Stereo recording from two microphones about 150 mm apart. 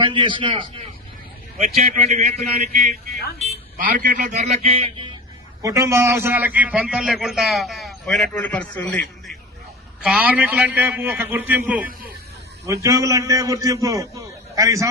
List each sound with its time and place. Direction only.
0.0 s a man's voice: 35° right (ahead or behind)
1.5 s a man's voice: 45° right (ahead or behind)
3.4 s a man's voice: 60° right (ahead or behind); by 5.0 s 40° right (ahead or behind)
5.6 s a man's voice: 20° right (ahead or behind); by 9.3 s 5° left (ahead or behind)
10.0 s a man's voice: 5° right (ahead or behind)